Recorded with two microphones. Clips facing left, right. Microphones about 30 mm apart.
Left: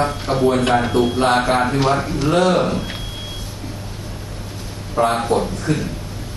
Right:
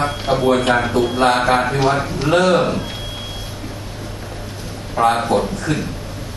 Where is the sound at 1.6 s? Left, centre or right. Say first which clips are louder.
Even; centre.